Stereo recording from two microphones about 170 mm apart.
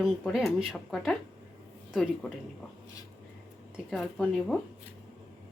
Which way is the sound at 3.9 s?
Centre (ahead or behind).